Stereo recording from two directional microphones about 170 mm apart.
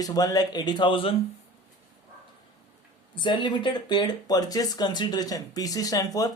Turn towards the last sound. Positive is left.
turn(degrees=20)  # may be behind; listen again after turning